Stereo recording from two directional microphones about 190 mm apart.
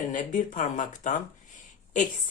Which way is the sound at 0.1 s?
40° left (ahead or behind).